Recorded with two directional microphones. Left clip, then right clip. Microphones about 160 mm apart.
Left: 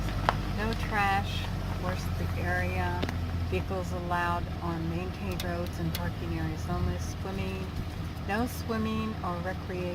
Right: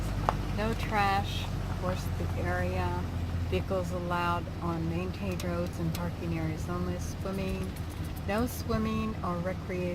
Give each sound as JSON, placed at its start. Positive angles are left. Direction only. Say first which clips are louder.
{"t": 0.3, "sound": "a sound", "louder": "left 2 dB", "side_deg": -30}
{"t": 0.6, "sound": "speech", "louder": "even", "side_deg": 0}
{"t": 2.5, "sound": "speech", "louder": "left 2 dB", "side_deg": 10}
{"t": 4.1, "sound": "speech", "louder": "left 1 dB", "side_deg": 0}
{"t": 8.3, "sound": "speech", "louder": "even", "side_deg": 0}